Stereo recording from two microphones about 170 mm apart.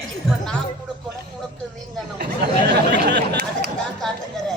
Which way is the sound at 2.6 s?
80° right.